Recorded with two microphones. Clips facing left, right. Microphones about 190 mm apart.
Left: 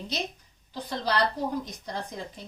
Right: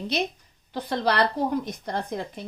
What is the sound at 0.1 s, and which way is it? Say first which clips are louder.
A woman's voice: right 6 dB; 60° right (ahead or behind).